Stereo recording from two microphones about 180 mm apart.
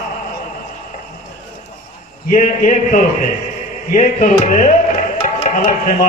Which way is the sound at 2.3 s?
45° left (ahead or behind).